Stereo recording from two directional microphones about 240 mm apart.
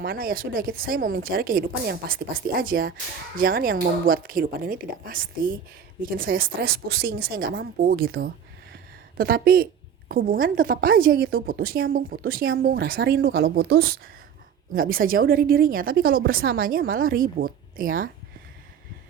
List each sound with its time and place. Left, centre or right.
0.0 s a woman's voice: right